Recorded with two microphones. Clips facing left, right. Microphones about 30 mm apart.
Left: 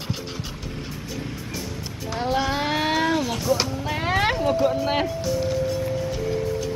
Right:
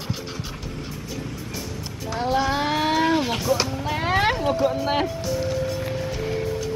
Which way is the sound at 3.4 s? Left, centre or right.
Centre.